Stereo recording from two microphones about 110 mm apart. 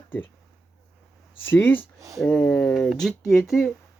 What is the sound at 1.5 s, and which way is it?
Speech, 15° left (ahead or behind).